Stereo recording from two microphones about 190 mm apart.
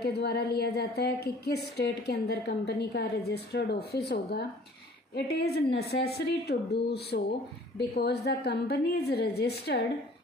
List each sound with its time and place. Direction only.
0.0 s a woman's voice: 60° left (ahead or behind)